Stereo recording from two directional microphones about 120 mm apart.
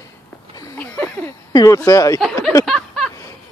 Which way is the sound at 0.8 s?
15° left (ahead or behind).